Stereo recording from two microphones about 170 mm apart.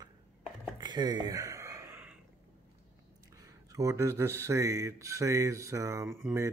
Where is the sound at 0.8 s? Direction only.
25° right (ahead or behind).